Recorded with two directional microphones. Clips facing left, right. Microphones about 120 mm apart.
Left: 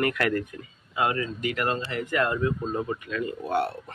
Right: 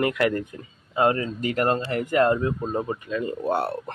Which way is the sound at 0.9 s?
35° right (ahead or behind).